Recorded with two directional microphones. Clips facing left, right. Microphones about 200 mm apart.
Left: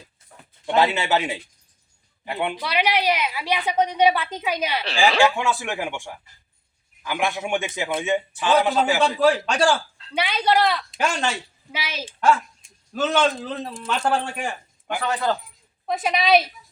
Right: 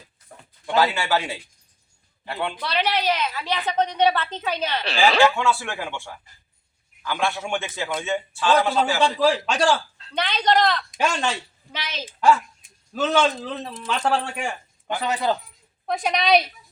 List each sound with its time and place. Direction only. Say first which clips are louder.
0.8 s a man's voice: left 1 dB; 20° left (ahead or behind)
9.0 s a man's voice: left 1 dB; 5° left (ahead or behind)
15.0 s speech: even; 15° right (ahead or behind)
15.9 s a man's voice: left 1 dB; 5° left (ahead or behind)